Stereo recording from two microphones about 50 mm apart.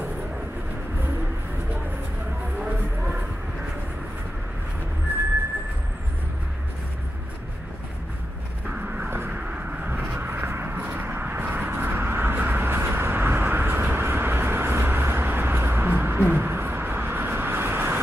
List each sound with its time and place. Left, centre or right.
8.6 s vehicle: right
9.8 s a sound: right
12.4 s vehicle: right